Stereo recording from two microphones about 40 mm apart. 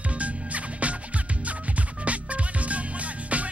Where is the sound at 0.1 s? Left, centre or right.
Right.